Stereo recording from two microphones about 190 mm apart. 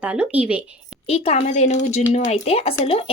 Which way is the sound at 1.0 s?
30° left (ahead or behind).